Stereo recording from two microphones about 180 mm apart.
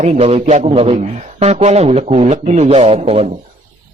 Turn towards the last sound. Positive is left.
turn(degrees=-35)  # may be behind; listen again after turning